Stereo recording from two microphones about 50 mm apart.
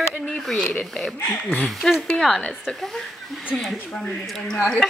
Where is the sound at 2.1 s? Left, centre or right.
Centre.